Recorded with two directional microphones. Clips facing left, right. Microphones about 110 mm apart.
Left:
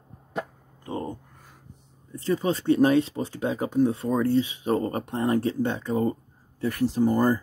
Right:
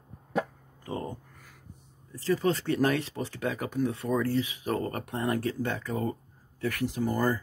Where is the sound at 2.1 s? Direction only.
25° left (ahead or behind).